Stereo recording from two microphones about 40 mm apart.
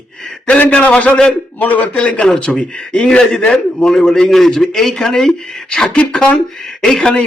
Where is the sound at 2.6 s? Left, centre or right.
Left; by 5.6 s centre.